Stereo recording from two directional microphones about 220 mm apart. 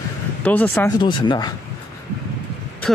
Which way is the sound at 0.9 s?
20° left (ahead or behind).